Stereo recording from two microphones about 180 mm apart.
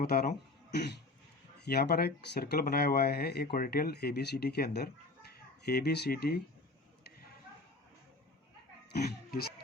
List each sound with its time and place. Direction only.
0.0 s speech: 55° left (ahead or behind)
1.6 s speech: 60° left (ahead or behind)
8.9 s speech: 60° left (ahead or behind)